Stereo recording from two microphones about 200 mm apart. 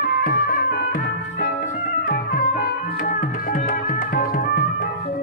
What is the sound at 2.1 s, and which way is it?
Music, 45° left (ahead or behind).